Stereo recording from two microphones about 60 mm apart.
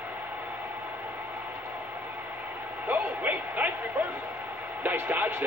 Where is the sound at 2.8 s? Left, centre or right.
Right.